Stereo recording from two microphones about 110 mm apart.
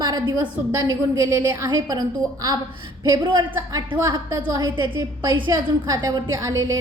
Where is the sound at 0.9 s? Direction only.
40° right (ahead or behind).